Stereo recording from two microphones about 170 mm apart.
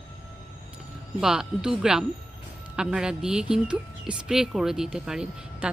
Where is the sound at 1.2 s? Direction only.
5° right (ahead or behind).